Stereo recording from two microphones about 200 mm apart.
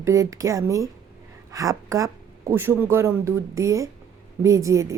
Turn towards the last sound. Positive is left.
turn(degrees=-15)  # may be behind; listen again after turning